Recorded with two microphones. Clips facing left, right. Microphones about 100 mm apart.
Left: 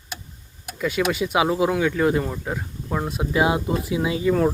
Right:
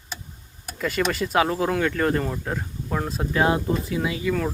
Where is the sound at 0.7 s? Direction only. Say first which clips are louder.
Left 2 dB; 5° left (ahead or behind).